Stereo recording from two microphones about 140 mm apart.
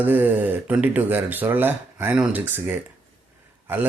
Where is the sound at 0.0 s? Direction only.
15° right (ahead or behind).